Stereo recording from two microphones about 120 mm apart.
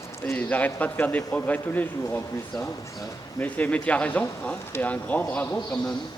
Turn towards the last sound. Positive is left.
turn(degrees=10)  # may be behind; listen again after turning